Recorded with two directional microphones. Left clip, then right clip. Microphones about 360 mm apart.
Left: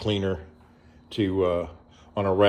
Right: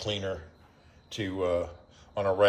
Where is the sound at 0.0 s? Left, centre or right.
Centre.